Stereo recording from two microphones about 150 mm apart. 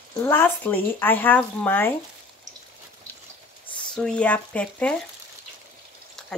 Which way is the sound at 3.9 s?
5° left (ahead or behind).